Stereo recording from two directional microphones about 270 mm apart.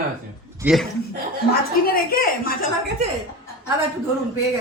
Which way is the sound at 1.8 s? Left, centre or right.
Left.